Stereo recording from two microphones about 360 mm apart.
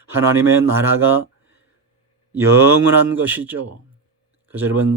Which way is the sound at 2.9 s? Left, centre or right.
Centre.